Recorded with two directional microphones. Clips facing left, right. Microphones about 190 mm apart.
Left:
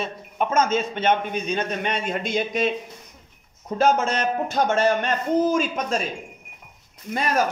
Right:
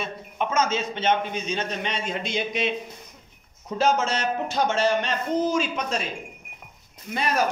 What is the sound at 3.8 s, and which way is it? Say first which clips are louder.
A man's voice: left 2 dB; 55° left (ahead or behind).